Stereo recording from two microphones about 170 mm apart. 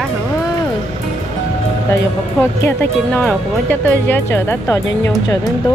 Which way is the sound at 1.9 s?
15° left (ahead or behind).